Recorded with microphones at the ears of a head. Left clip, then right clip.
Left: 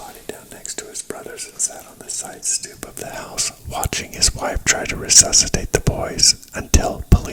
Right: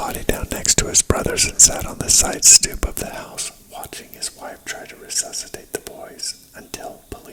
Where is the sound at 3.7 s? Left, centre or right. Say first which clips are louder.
Left 10 dB; left.